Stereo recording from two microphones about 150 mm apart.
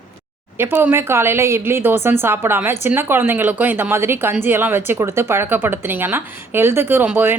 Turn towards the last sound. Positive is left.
turn(degrees=-15)  # may be behind; listen again after turning